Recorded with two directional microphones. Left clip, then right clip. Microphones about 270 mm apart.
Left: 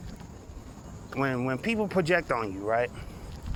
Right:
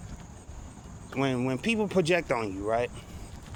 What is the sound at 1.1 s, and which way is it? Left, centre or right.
Speech, right.